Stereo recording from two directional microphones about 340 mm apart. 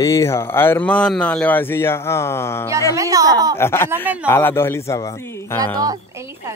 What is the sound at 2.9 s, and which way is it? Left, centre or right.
Speech, centre.